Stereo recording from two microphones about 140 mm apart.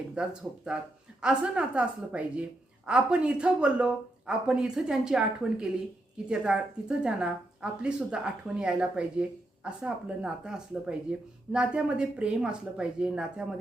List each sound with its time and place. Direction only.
0.1 s a woman's voice: 5° right (ahead or behind)